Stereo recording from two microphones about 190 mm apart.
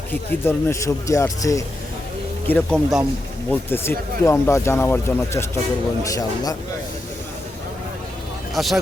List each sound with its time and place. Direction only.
0.1 s speech: 15° left (ahead or behind)
2.5 s speech: 5° left (ahead or behind)
2.7 s speech: 10° right (ahead or behind)
3.5 s speech: 10° left (ahead or behind)
8.5 s speech: centre (ahead or behind)